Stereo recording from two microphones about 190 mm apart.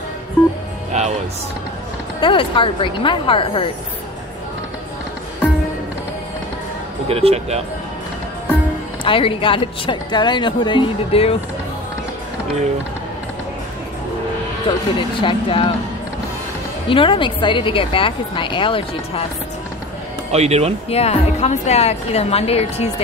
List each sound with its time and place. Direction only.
0.9 s music: 35° right (ahead or behind)
2.1 s a woman's voice: 25° left (ahead or behind)
7.1 s speech: 30° right (ahead or behind)
9.0 s a woman's voice: 25° left (ahead or behind)
15.0 s a woman's voice: 25° left (ahead or behind)
16.9 s a woman's voice: 25° left (ahead or behind)
20.2 s speech: 35° right (ahead or behind)
20.9 s a woman's voice: 35° left (ahead or behind)